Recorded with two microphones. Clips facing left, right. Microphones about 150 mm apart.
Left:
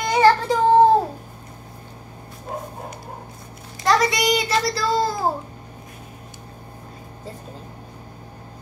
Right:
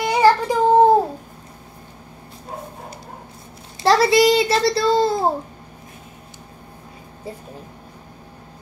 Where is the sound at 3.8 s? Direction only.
30° right (ahead or behind).